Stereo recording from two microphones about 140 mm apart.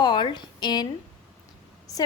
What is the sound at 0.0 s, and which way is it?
Speech, 35° left (ahead or behind).